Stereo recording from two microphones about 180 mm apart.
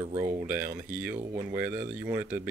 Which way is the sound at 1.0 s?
10° right (ahead or behind).